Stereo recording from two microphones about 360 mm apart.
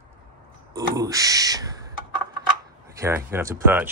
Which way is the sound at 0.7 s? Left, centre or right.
Centre.